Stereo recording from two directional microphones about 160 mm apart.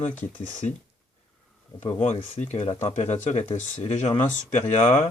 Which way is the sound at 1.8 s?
40° left (ahead or behind).